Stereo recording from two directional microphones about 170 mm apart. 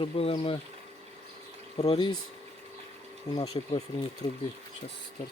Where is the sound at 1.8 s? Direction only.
30° left (ahead or behind).